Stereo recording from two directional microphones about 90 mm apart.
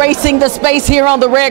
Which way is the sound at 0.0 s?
20° right (ahead or behind).